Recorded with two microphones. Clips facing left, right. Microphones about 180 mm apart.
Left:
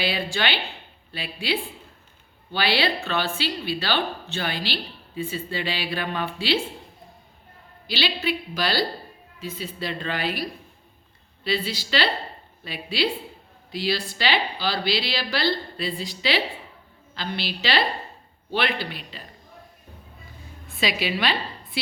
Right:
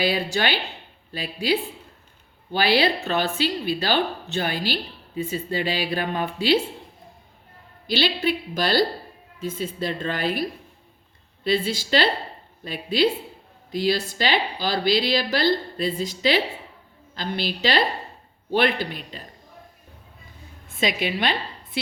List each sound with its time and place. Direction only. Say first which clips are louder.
0.0 s a woman's voice: right 3 dB; 40° right (ahead or behind)
7.9 s speech: right 4 dB; 50° right (ahead or behind)
11.4 s speech: right 4 dB; 50° right (ahead or behind)
20.7 s speech: right 2 dB; 45° right (ahead or behind)